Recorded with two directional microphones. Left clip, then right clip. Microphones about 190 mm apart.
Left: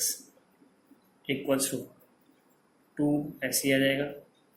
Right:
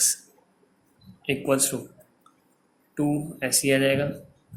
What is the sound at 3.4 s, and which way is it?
Speech, 35° right (ahead or behind).